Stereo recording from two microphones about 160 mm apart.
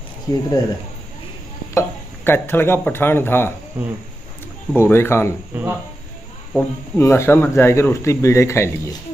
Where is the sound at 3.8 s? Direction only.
10° right (ahead or behind).